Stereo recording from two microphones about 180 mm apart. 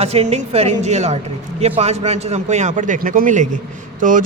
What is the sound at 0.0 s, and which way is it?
A man's voice, 35° right (ahead or behind).